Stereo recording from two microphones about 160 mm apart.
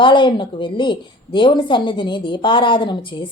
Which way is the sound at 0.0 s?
30° left (ahead or behind).